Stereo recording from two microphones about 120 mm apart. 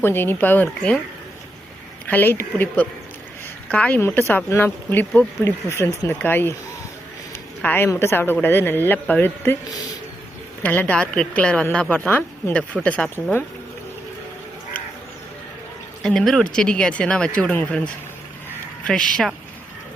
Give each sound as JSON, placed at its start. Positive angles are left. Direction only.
{"t": 0.0, "sound": "speech", "side_deg": 20}
{"t": 2.0, "sound": "speech", "side_deg": 15}
{"t": 7.6, "sound": "speech", "side_deg": 15}
{"t": 10.6, "sound": "speech", "side_deg": 15}
{"t": 16.0, "sound": "speech", "side_deg": 5}